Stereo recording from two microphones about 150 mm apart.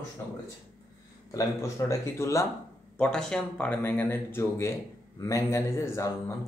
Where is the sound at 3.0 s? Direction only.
5° left (ahead or behind).